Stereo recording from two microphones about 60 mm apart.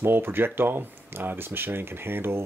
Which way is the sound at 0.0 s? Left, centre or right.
Right.